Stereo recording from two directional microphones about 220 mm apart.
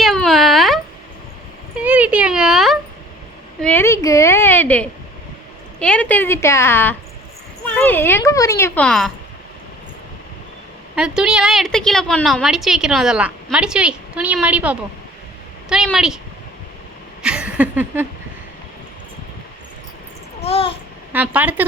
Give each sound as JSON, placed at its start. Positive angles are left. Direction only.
{"t": 0.0, "sound": "a sound", "side_deg": 0}
{"t": 3.6, "sound": "speech", "side_deg": 10}
{"t": 10.9, "sound": "a woman's voice", "side_deg": -5}
{"t": 17.2, "sound": "a sound", "side_deg": -5}
{"t": 20.4, "sound": "babbling", "side_deg": 25}
{"t": 21.1, "sound": "speech", "side_deg": -5}